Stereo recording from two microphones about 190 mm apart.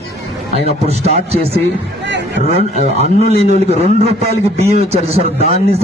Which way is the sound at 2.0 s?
65° right (ahead or behind).